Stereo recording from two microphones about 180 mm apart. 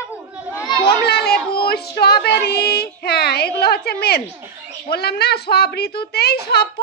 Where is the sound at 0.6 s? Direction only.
25° left (ahead or behind).